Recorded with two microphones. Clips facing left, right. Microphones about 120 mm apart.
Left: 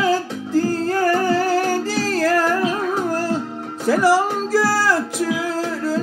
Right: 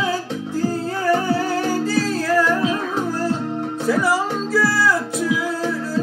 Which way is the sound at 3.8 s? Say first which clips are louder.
Left 4 dB; 90° left.